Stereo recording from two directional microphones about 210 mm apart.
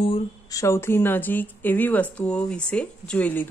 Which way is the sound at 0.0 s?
25° left (ahead or behind).